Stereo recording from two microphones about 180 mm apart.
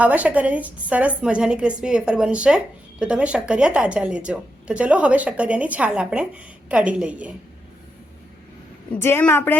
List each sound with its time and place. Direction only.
0.0 s a woman's voice: 10° right (ahead or behind)
9.0 s a woman's voice: 15° left (ahead or behind)